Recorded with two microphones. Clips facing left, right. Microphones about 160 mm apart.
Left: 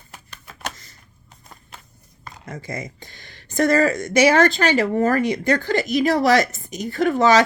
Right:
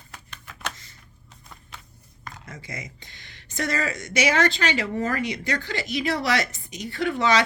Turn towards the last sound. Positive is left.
turn(degrees=45)  # may be behind; listen again after turning